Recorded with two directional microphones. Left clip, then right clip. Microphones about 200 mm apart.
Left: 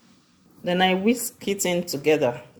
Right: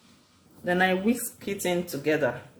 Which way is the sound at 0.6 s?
35° left (ahead or behind).